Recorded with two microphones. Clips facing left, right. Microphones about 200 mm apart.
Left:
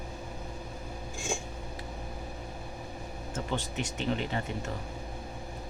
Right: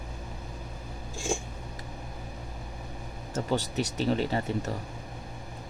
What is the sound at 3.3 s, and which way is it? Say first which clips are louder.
Speech: right 5 dB; 40° right (ahead or behind).